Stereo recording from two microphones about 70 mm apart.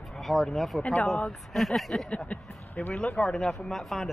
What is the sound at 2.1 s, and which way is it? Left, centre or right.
Speech, centre.